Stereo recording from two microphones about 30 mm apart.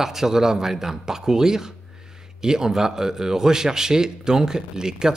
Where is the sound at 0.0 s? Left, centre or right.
Centre.